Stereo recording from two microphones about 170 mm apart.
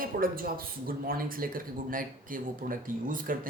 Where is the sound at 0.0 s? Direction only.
60° right (ahead or behind).